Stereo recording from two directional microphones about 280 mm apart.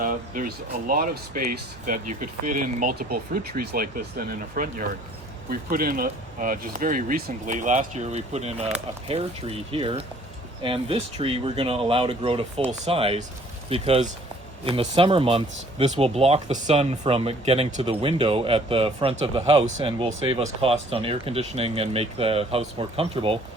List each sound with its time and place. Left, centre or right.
0.0 s speech: right